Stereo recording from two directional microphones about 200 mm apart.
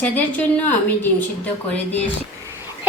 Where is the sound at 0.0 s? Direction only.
5° left (ahead or behind).